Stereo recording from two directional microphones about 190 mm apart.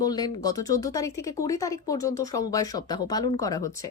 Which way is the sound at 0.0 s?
20° left (ahead or behind).